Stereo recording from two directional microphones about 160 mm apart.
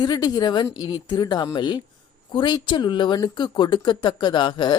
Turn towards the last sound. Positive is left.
turn(degrees=30)  # may be behind; listen again after turning